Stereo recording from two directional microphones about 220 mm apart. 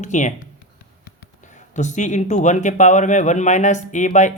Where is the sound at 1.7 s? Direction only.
35° left (ahead or behind).